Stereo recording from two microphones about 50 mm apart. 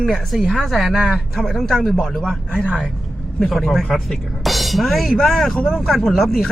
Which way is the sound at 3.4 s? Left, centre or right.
Centre.